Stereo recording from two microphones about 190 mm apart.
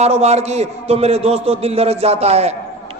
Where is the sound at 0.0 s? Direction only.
35° right (ahead or behind).